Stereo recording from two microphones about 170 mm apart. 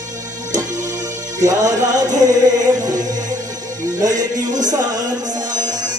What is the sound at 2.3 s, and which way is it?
Music, 20° right (ahead or behind).